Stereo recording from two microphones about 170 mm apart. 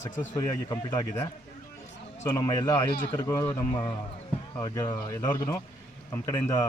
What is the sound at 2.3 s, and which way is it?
Speech, 20° left (ahead or behind).